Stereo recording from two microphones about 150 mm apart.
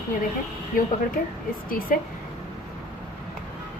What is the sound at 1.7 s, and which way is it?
Speech, 70° left (ahead or behind).